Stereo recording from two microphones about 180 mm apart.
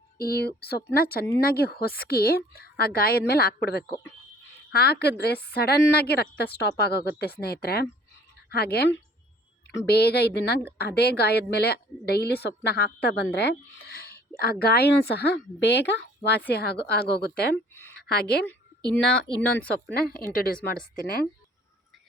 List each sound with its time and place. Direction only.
0.2 s a woman's voice: 60° left (ahead or behind)
13.3 s a sound: 65° left (ahead or behind)
14.6 s a woman's voice: 60° left (ahead or behind)